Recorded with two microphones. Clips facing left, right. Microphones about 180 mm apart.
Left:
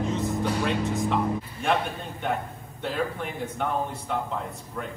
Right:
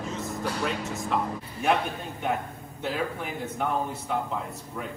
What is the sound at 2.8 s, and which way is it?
Speech, 5° right (ahead or behind).